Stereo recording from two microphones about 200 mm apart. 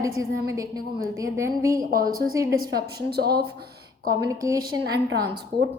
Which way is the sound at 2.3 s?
15° right (ahead or behind).